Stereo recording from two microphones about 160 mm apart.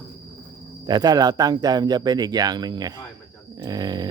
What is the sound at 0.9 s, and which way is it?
Speech, 25° right (ahead or behind).